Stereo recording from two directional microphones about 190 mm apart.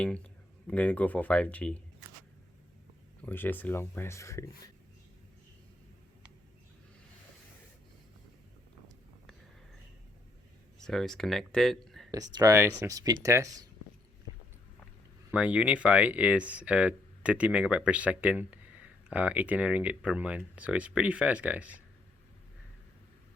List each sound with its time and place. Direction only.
0.0 s speech: 5° left (ahead or behind)
3.2 s speech: 10° left (ahead or behind)
10.8 s speech: centre (ahead or behind)
12.1 s speech: 20° right (ahead or behind)
15.3 s speech: 5° right (ahead or behind)